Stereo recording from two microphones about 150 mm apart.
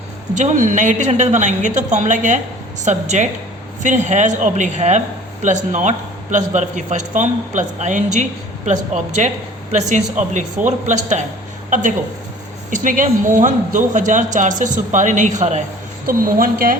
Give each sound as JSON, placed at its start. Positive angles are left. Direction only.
{"t": 0.3, "sound": "a man's voice", "side_deg": -55}
{"t": 16.0, "sound": "a woman's voice", "side_deg": -70}